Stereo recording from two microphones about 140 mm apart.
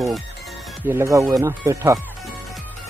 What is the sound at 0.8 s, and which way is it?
Speech, 15° right (ahead or behind).